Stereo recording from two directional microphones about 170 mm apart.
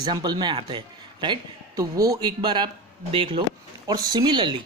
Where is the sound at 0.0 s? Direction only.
25° right (ahead or behind).